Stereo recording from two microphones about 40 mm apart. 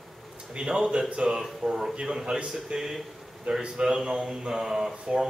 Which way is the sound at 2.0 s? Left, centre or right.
Centre.